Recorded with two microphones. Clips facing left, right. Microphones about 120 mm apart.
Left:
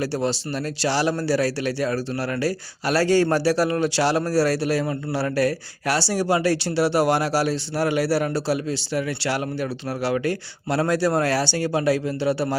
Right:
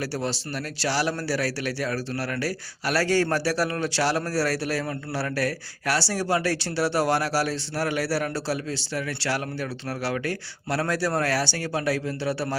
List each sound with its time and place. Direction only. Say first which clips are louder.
0.0 s a man's voice: left 5 dB; 20° left (ahead or behind)